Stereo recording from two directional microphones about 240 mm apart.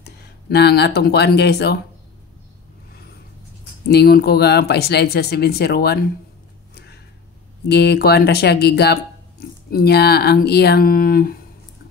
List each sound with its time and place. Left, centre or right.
0.0 s speech: left
3.9 s speech: left
7.6 s speech: left